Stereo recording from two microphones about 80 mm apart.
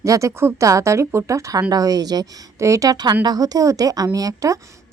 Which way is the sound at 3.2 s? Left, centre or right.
Right.